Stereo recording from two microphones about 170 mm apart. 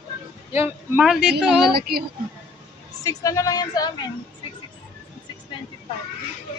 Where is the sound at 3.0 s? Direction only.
20° left (ahead or behind).